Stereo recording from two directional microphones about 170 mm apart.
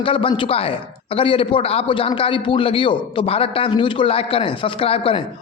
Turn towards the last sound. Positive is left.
turn(degrees=35)  # may be behind; listen again after turning